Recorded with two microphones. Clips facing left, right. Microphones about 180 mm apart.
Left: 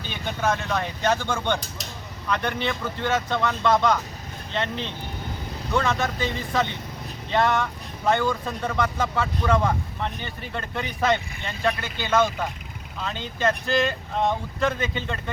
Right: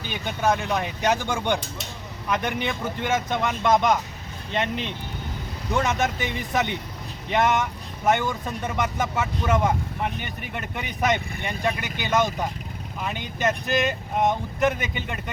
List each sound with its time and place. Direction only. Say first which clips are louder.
0.0 s speech: right 1 dB; 15° right (ahead or behind)